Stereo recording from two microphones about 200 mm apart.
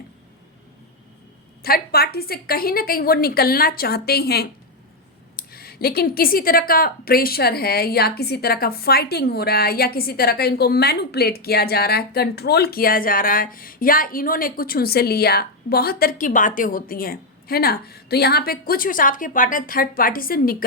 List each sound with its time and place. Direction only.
1.6 s a woman's voice: 50° left (ahead or behind)